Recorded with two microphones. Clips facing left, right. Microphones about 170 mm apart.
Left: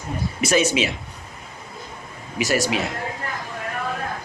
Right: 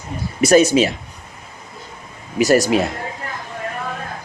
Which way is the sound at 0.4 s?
40° right (ahead or behind).